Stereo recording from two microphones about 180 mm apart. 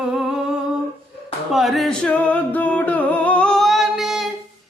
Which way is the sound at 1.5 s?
Centre (ahead or behind).